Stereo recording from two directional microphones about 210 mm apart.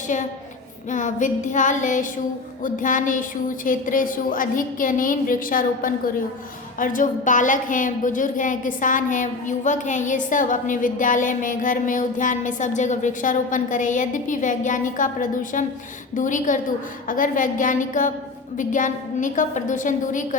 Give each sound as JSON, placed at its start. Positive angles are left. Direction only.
{"t": 0.9, "sound": "a woman's voice", "side_deg": 35}